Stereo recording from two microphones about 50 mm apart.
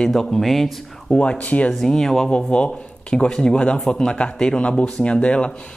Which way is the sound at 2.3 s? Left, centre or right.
Left.